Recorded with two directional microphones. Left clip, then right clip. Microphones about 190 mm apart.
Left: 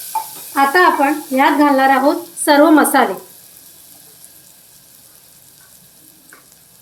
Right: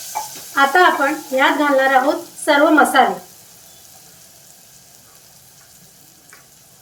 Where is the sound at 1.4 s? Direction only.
35° left (ahead or behind).